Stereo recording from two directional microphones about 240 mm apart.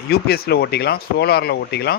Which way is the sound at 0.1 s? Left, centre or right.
Left.